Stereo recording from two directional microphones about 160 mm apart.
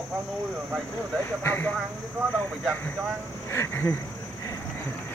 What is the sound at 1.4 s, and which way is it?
Speech, 15° left (ahead or behind).